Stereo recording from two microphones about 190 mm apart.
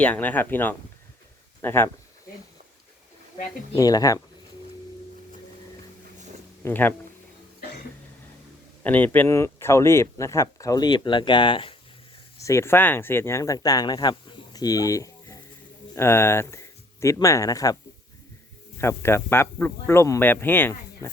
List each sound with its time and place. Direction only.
0.0 s speech: 10° left (ahead or behind)
3.8 s speech: 20° left (ahead or behind)
6.6 s speech: 10° left (ahead or behind)
8.8 s speech: 10° left (ahead or behind); by 11.8 s 25° left (ahead or behind)
12.4 s speech: 15° left (ahead or behind)
18.8 s speech: 15° left (ahead or behind)